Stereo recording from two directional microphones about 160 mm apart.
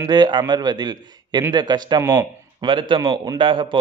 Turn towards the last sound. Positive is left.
turn(degrees=-30)  # may be behind; listen again after turning